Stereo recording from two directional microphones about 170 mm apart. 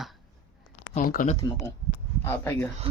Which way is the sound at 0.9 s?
50° left (ahead or behind).